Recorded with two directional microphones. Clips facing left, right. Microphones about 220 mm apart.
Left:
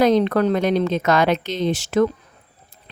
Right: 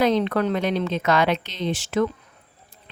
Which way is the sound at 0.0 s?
40° left (ahead or behind).